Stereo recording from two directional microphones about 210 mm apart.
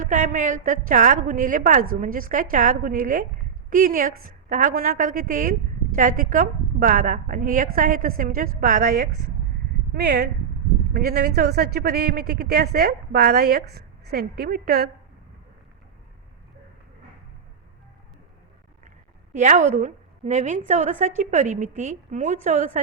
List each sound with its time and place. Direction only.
0.0 s a woman's voice: 40° right (ahead or behind)
18.9 s a sound: 35° right (ahead or behind)
19.8 s a woman's voice: 35° right (ahead or behind)